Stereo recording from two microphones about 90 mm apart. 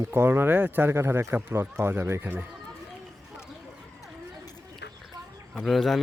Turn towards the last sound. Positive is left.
turn(degrees=0)  # may be behind; listen again after turning